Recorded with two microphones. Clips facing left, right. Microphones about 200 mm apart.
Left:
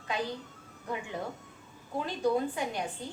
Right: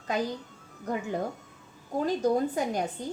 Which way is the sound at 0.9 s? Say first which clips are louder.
Right 5 dB; 45° right (ahead or behind).